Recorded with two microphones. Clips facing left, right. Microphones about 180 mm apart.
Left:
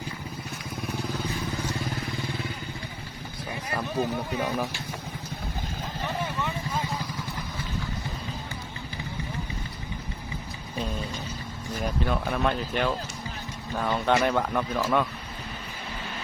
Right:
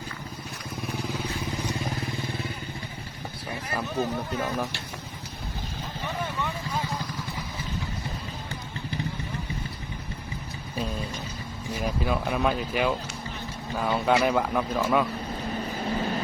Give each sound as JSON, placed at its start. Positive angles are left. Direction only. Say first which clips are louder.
{"t": 3.9, "sound": "speech", "louder": "left 1 dB", "side_deg": 10}
{"t": 6.4, "sound": "vehicle", "louder": "even", "side_deg": 0}
{"t": 11.7, "sound": "speech", "louder": "right 1 dB", "side_deg": -5}
{"t": 15.8, "sound": "vehicle", "louder": "right 10 dB", "side_deg": -40}